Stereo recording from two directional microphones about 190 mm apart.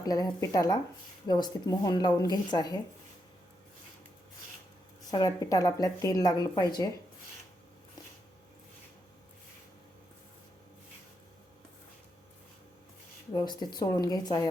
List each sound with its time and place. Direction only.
0.0 s a woman's voice: 20° left (ahead or behind)
5.1 s a woman's voice: 20° left (ahead or behind)
13.3 s a woman's voice: 20° left (ahead or behind)